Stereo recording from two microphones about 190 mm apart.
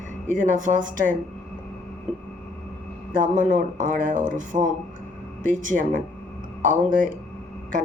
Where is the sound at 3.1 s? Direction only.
45° right (ahead or behind).